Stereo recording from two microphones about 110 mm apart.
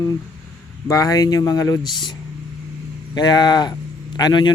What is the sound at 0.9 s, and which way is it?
Speech, 35° left (ahead or behind).